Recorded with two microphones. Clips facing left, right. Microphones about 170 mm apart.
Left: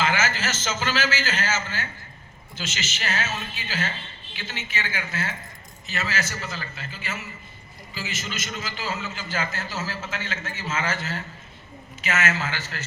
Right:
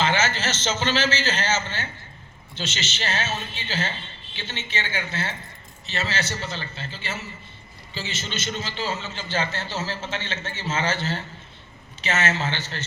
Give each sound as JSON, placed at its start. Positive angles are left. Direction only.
{"t": 0.0, "sound": "a sound", "side_deg": -25}
{"t": 0.6, "sound": "a man's voice", "side_deg": -30}
{"t": 3.0, "sound": "a man's voice", "side_deg": -25}